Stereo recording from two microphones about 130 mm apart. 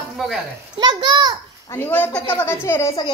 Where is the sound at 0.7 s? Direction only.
35° right (ahead or behind).